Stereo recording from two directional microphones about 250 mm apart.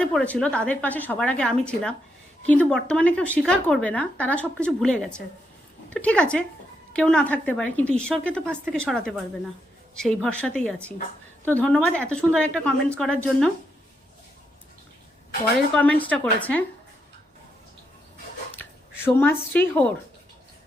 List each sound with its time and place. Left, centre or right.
0.0 s speech: centre
15.7 s speech: centre
19.0 s a woman's voice: centre